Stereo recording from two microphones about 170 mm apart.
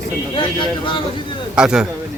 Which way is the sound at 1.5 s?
5° right (ahead or behind).